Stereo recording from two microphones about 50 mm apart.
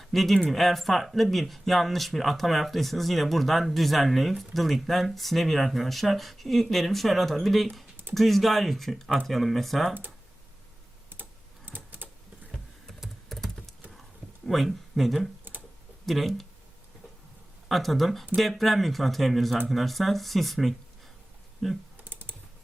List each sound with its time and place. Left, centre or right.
0.0 s speech: centre
11.2 s typing: right
12.9 s typing: centre
14.4 s speech: centre
17.7 s speech: centre
21.9 s typing: right